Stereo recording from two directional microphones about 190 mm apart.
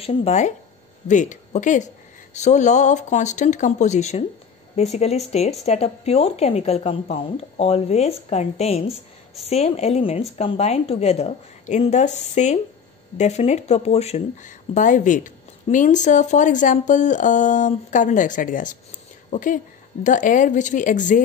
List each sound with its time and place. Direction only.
0.0 s speech: 35° left (ahead or behind)